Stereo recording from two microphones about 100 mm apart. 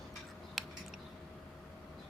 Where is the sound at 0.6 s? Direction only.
Centre (ahead or behind).